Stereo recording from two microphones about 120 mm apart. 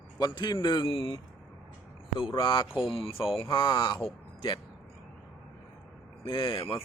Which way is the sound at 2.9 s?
50° left (ahead or behind).